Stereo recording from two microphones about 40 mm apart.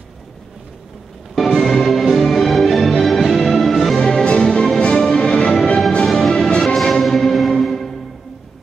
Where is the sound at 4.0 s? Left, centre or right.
Centre.